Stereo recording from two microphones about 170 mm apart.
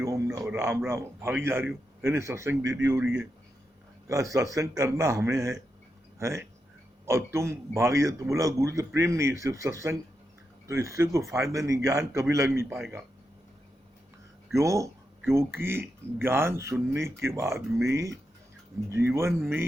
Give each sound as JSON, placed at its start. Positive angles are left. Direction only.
{"t": 0.0, "sound": "a sound", "side_deg": -20}
{"t": 0.5, "sound": "a man's voice", "side_deg": -15}
{"t": 4.1, "sound": "a man's voice", "side_deg": -20}
{"t": 14.5, "sound": "a man's voice", "side_deg": -20}